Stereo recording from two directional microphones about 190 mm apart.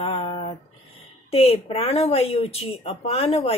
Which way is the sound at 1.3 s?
30° left (ahead or behind).